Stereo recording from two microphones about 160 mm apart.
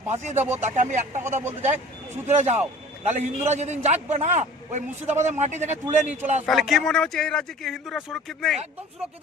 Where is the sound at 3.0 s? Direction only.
45° right (ahead or behind).